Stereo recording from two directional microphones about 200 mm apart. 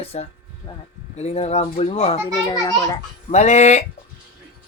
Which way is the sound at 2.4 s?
20° left (ahead or behind).